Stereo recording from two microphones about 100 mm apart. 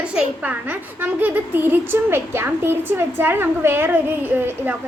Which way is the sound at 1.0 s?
20° right (ahead or behind).